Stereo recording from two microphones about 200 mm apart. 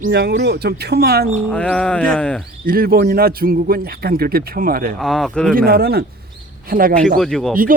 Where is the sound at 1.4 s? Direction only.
5° left (ahead or behind).